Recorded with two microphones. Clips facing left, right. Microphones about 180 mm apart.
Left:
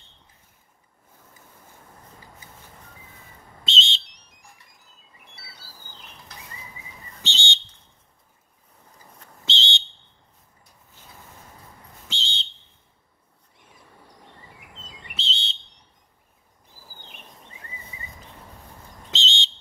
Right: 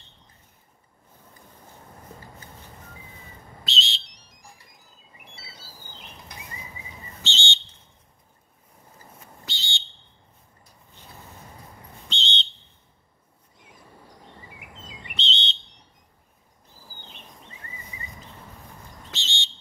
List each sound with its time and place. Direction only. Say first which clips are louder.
3.6 s whistle: left 3 dB; 25° left (ahead or behind)
7.2 s whistle: even; 15° left (ahead or behind)
9.4 s whistle: left 7 dB; 20° left (ahead or behind)
12.1 s whistle: right 3 dB; 10° left (ahead or behind)
15.1 s whistle: right 3 dB; 5° left (ahead or behind)
19.0 s whistle: left 7 dB; 20° left (ahead or behind)